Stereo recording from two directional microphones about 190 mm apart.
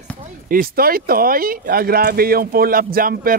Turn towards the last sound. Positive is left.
turn(degrees=-50)  # may be behind; listen again after turning